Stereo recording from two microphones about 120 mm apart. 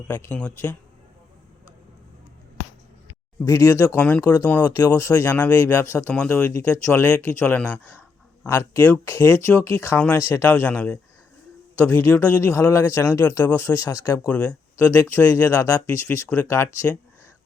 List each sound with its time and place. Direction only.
0.1 s speech: 15° left (ahead or behind)
3.4 s speech: 30° left (ahead or behind)
3.9 s speech: 10° left (ahead or behind)
4.2 s speech: 30° left (ahead or behind)
5.3 s speech: 10° left (ahead or behind)
6.1 s speech: 10° left (ahead or behind)
8.4 s speech: 20° left (ahead or behind)
10.5 s speech: 10° left (ahead or behind); by 14.1 s 25° left (ahead or behind)
14.3 s speech: 10° left (ahead or behind)